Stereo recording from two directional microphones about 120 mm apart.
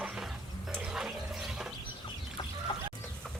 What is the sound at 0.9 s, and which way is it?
Toilet flush, 5° right (ahead or behind).